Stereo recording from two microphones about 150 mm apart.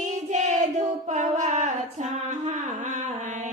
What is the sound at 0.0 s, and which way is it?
Child singing, 50° right (ahead or behind).